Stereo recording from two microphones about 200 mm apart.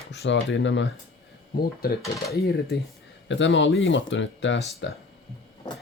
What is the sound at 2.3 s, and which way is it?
Speech, 50° left (ahead or behind).